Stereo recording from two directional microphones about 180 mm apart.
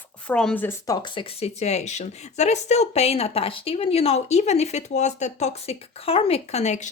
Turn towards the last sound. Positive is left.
turn(degrees=40)  # may be behind; listen again after turning